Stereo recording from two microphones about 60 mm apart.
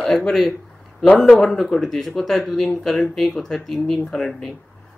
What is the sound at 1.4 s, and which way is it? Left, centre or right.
Speech, centre.